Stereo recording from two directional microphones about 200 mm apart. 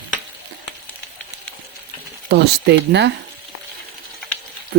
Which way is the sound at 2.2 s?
55° right (ahead or behind).